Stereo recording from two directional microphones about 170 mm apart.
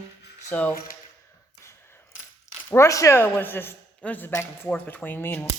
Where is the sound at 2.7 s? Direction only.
20° left (ahead or behind).